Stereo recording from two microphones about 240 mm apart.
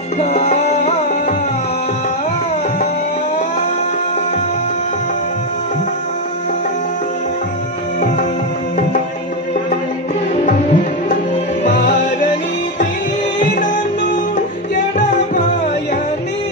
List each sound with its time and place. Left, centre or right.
0.2 s music: left
10.4 s music: left
15.0 s music: left